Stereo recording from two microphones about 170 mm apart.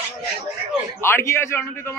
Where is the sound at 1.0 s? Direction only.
15° left (ahead or behind).